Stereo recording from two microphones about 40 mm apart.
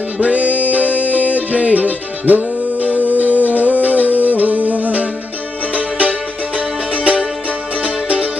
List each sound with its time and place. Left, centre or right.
0.2 s music: right